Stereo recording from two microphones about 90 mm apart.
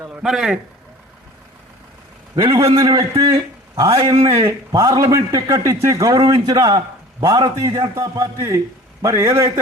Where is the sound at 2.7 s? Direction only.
45° right (ahead or behind).